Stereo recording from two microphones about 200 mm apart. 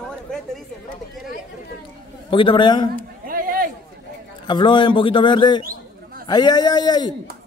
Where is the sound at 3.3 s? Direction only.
45° right (ahead or behind).